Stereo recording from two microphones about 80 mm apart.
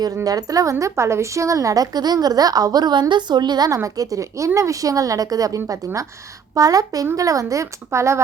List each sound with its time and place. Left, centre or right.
0.3 s speech: right
3.9 s speech: right
6.6 s speech: right